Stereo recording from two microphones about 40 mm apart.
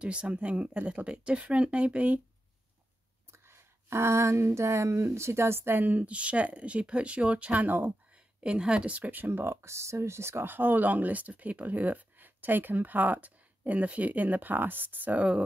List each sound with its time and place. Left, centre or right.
0.0 s speech: right
3.4 s a sound: right
5.9 s speech: right
8.4 s speech: right
9.0 s speech: right
10.2 s speech: right
15.1 s speech: right